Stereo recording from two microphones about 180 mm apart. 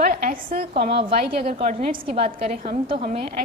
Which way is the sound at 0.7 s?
30° right (ahead or behind).